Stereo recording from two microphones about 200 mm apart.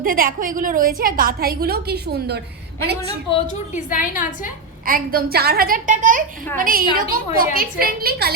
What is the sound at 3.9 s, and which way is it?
Speech, 40° left (ahead or behind).